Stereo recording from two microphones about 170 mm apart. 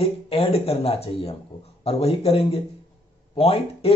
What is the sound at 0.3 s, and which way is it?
Speech, 35° left (ahead or behind).